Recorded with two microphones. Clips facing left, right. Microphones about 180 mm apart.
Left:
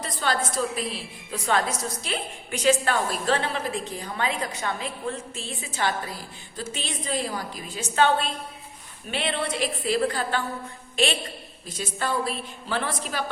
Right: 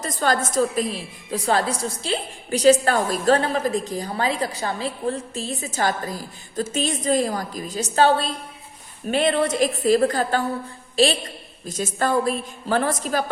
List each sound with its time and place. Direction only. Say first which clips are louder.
0.0 s a woman's voice: right 5 dB; 45° right (ahead or behind)
11.7 s a woman's voice: right 6 dB; 45° right (ahead or behind)